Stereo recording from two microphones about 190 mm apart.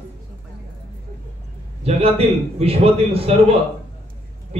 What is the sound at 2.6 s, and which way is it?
Speech, 30° right (ahead or behind).